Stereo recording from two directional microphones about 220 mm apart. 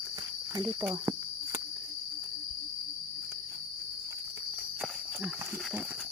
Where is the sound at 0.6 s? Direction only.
15° right (ahead or behind).